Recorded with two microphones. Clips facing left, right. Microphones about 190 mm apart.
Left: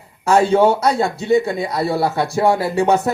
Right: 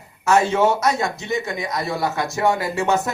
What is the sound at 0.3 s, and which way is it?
A man's voice, 30° left (ahead or behind).